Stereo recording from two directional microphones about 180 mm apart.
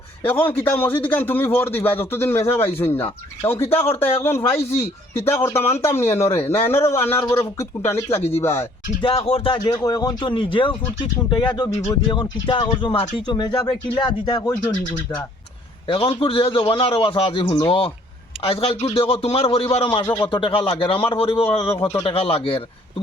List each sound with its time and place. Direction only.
0.2 s a man's voice: 10° left (ahead or behind)
9.0 s a man's voice: 30° left (ahead or behind)
9.6 s a man's voice: 20° left (ahead or behind)
15.9 s a man's voice: 30° left (ahead or behind)
21.8 s a man's voice: 15° left (ahead or behind)
22.0 s a man's voice: 30° left (ahead or behind)